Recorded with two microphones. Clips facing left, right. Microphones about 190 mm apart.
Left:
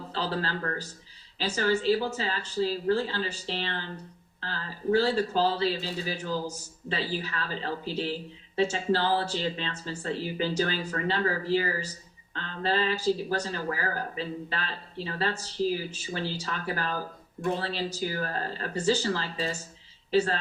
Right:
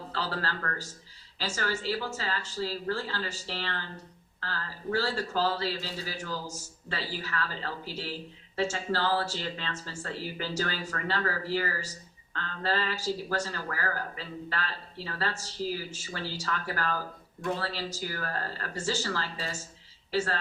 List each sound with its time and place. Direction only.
0.1 s a woman's voice: 15° left (ahead or behind)